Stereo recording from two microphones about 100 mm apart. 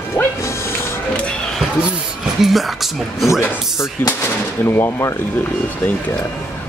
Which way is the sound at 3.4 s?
30° left (ahead or behind).